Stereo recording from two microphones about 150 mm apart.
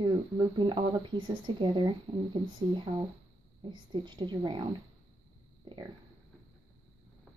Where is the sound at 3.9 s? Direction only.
30° right (ahead or behind).